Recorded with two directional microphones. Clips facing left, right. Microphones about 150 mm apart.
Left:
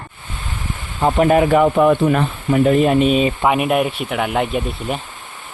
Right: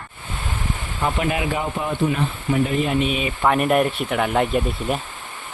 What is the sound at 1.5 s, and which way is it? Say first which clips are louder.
Speech: left 12 dB; 70° left (ahead or behind).